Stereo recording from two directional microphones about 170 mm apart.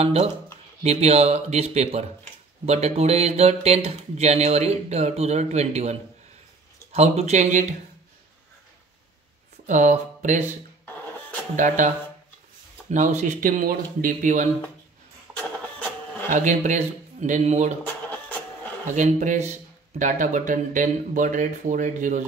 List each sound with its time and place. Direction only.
0.0 s speech: 35° right (ahead or behind)
9.7 s speech: 45° right (ahead or behind)
11.5 s speech: 50° right (ahead or behind)
12.9 s speech: 45° right (ahead or behind)
15.3 s printer: 10° left (ahead or behind)
16.3 s speech: 50° right (ahead or behind)
17.8 s a sound: 10° left (ahead or behind)
18.9 s speech: 45° right (ahead or behind)